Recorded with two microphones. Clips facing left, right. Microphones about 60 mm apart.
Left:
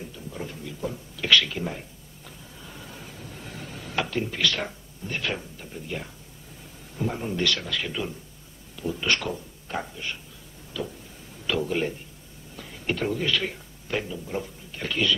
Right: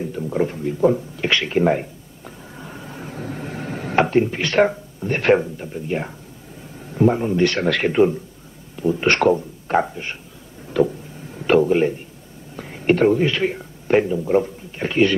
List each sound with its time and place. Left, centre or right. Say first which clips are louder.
0.1 s speech: right 14 dB; right
1.2 s speech: right 1 dB; right
1.6 s a sound: right 15 dB; right
4.6 s speech: right 16 dB; right
5.6 s a man's voice: right 10 dB; right
7.2 s a man's voice: right 9 dB; right
7.6 s a man's voice: right 14 dB; right
8.7 s speech: right 10 dB; right
9.1 s speech: right 12 dB; right
10.8 s a sound: right 15 dB; right
13.2 s a man's voice: right 7 dB; right
13.6 s a man's voice: right 13 dB; right